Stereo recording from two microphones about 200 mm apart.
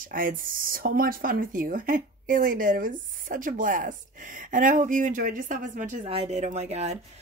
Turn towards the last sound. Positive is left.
turn(degrees=-35)  # may be behind; listen again after turning